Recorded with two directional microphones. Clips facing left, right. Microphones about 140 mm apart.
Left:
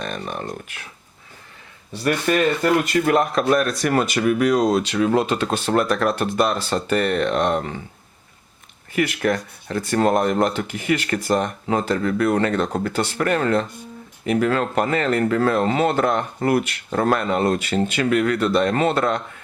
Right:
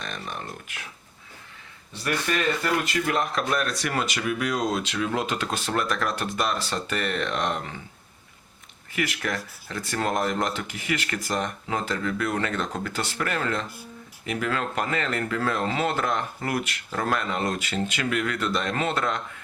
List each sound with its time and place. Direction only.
0.2 s speech: 35° left (ahead or behind)
2.2 s speech: 45° left (ahead or behind)
5.7 s speech: 45° left (ahead or behind)
6.1 s speech: 30° left (ahead or behind)
9.2 s speech: 45° left (ahead or behind)
9.6 s speech: 30° left (ahead or behind)
10.1 s speech: 50° left (ahead or behind)
10.7 s speech: 35° left (ahead or behind)
17.4 s speech: 35° left (ahead or behind)